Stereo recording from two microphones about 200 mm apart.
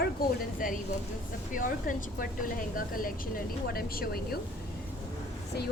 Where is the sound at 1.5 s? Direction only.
40° left (ahead or behind).